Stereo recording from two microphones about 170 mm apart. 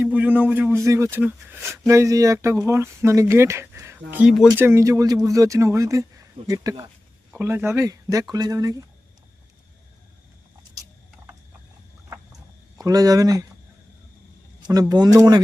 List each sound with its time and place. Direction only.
0.0 s speech: 10° right (ahead or behind)
4.5 s speech: 15° right (ahead or behind)
12.8 s speech: 20° right (ahead or behind)
14.6 s speech: 20° right (ahead or behind)